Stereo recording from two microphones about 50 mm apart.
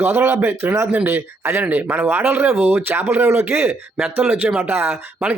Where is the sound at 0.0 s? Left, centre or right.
Right.